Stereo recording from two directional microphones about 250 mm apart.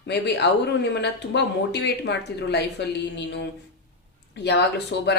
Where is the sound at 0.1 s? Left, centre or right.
Left.